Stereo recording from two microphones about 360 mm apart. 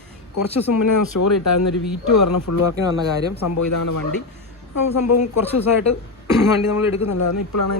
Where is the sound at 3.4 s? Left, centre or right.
Left.